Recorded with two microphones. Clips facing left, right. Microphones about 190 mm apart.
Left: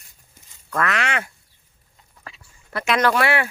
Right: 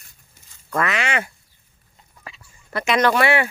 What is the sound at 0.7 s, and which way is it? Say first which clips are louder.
Speech: right 1 dB; centre (ahead or behind).